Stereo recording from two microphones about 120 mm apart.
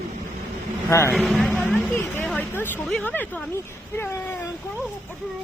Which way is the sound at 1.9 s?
15° left (ahead or behind).